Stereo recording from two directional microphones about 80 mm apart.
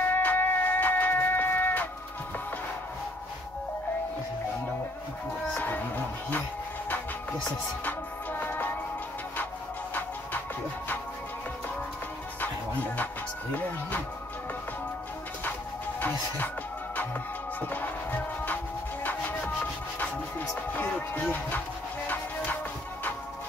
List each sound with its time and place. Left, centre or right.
0.0 s music: left
5.6 s music: left
7.8 s music: left
16.0 s speech: left
16.9 s music: left